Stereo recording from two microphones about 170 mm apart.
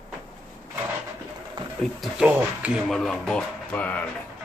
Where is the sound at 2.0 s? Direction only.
5° right (ahead or behind).